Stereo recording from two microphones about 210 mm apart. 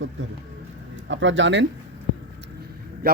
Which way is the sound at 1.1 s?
60° right (ahead or behind).